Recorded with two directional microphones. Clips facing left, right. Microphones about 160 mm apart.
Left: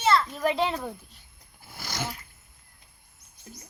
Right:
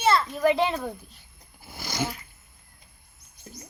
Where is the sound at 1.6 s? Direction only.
Centre (ahead or behind).